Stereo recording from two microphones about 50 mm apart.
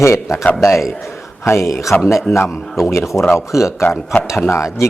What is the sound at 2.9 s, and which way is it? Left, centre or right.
Speech, left.